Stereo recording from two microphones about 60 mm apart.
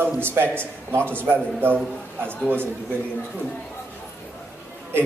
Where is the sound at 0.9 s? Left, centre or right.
Right.